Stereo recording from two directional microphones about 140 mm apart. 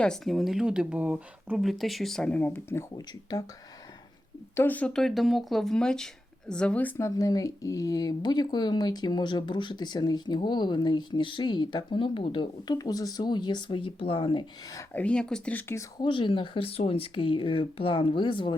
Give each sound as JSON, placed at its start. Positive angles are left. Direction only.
{"t": 0.0, "sound": "speech", "side_deg": 0}
{"t": 3.1, "sound": "speech", "side_deg": 30}
{"t": 4.5, "sound": "speech", "side_deg": 15}
{"t": 7.2, "sound": "speech", "side_deg": 25}
{"t": 14.9, "sound": "speech", "side_deg": 10}
{"t": 15.7, "sound": "speech", "side_deg": 20}
{"t": 16.0, "sound": "speech", "side_deg": 35}